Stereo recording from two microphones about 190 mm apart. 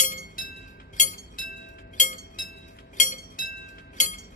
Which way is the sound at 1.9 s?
45° left (ahead or behind).